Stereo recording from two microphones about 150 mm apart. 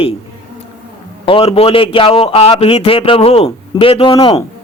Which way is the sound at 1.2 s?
35° left (ahead or behind).